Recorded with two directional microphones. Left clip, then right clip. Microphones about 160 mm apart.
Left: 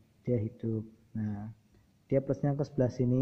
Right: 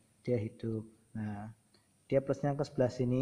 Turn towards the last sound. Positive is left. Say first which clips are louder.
# left 1 dB
turn(degrees=-5)  # may be behind; listen again after turning